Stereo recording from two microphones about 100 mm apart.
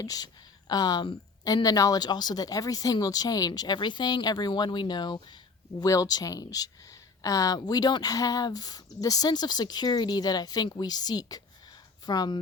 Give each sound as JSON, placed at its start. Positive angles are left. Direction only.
{"t": 0.0, "sound": "speech", "side_deg": 40}
{"t": 1.6, "sound": "speech", "side_deg": 40}